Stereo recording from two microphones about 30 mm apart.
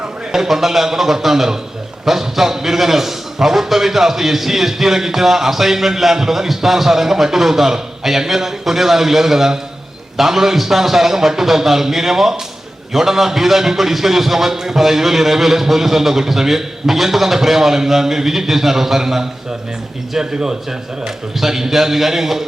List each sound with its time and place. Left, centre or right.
0.3 s a man's voice: centre